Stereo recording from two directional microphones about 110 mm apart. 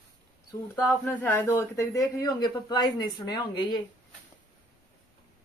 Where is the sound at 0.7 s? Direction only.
15° left (ahead or behind); by 3.8 s 40° left (ahead or behind).